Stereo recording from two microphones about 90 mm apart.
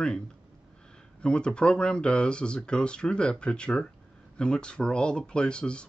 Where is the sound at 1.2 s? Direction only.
10° left (ahead or behind).